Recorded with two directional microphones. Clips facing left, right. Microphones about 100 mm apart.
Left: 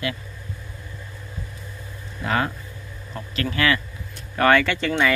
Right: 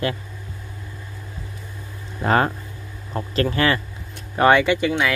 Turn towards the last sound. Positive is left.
turn(degrees=-10)  # may be behind; listen again after turning